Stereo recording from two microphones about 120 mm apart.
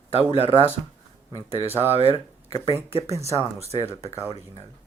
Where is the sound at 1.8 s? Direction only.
55° right (ahead or behind).